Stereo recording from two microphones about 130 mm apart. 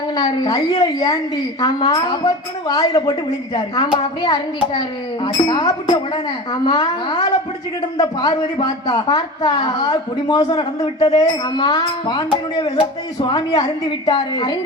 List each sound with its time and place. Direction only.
0.2 s a woman's voice: 30° left (ahead or behind)
8.3 s a man's voice: 45° left (ahead or behind)
9.0 s a woman's voice: 35° left (ahead or behind)
11.5 s a woman's voice: 35° left (ahead or behind)